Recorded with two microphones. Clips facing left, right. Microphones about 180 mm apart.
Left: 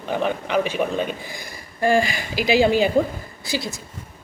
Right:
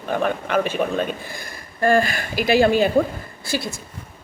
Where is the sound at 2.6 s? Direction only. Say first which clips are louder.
Right 1 dB; 15° left (ahead or behind).